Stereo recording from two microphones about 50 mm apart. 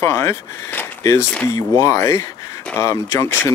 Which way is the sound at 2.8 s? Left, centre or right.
Left.